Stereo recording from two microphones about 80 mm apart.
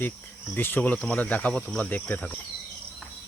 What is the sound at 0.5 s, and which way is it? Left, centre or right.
Speech, left.